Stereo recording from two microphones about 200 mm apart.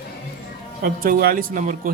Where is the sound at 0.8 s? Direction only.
50° right (ahead or behind).